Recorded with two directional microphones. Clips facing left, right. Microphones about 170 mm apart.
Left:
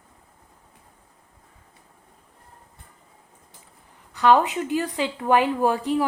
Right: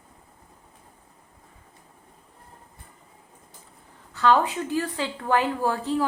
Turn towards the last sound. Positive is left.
turn(degrees=15)  # may be behind; listen again after turning